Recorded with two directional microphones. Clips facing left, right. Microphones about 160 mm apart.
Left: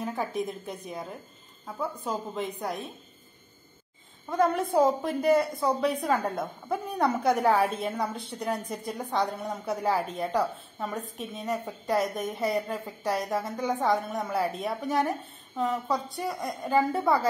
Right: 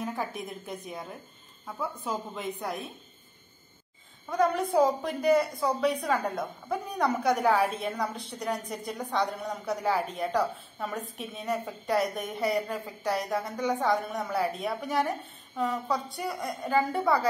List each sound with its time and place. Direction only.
0.0 s a woman's voice: centre (ahead or behind)
4.6 s a woman's voice: centre (ahead or behind)
5.9 s a woman's voice: 25° left (ahead or behind)
6.3 s a woman's voice: centre (ahead or behind)